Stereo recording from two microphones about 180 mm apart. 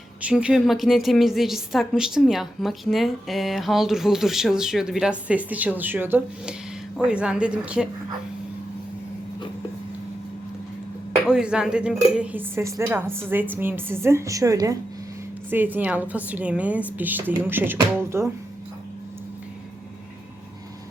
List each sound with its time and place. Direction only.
0.2 s a woman's voice: 5° right (ahead or behind)
11.3 s speech: 5° right (ahead or behind)